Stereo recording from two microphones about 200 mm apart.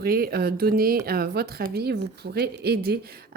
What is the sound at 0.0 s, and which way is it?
Speech, 50° right (ahead or behind).